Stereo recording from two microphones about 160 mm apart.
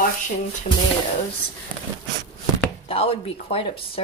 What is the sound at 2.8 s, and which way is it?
A woman's voice, 35° left (ahead or behind).